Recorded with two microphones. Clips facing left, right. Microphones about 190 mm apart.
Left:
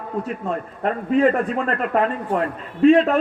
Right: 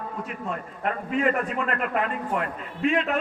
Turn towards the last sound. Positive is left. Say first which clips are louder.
# left 10 dB
turn(degrees=35)  # may be behind; listen again after turning